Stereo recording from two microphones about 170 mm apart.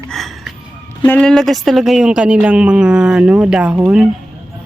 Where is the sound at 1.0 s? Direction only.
5° left (ahead or behind).